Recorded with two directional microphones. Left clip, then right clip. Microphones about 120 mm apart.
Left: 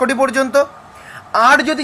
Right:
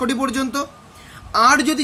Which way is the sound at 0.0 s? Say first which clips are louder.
Left 7 dB; 25° right (ahead or behind).